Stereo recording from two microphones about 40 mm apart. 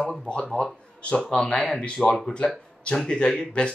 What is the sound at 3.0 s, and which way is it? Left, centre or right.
Speech, left.